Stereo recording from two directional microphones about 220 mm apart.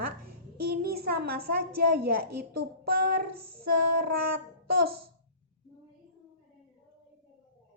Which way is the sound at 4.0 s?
45° right (ahead or behind).